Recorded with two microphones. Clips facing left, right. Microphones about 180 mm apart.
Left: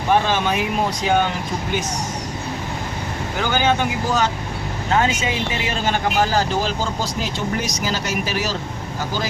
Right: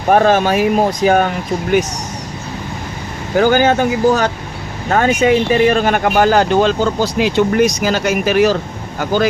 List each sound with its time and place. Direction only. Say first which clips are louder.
0.1 s speech: right 7 dB; 50° right (ahead or behind)
1.0 s speech: right 6 dB; 60° right (ahead or behind)
3.3 s speech: right 8 dB; 50° right (ahead or behind)